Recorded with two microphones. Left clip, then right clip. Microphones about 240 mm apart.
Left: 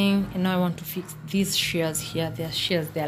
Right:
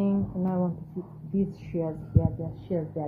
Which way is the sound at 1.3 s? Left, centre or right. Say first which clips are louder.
Left 3 dB; left.